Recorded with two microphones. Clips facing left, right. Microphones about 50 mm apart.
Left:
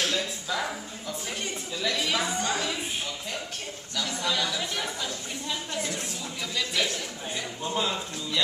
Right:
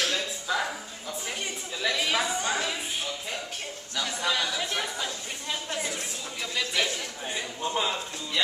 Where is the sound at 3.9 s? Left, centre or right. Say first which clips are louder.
Right 1 dB; centre.